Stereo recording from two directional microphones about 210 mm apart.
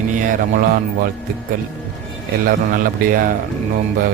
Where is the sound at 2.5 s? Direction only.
45° right (ahead or behind).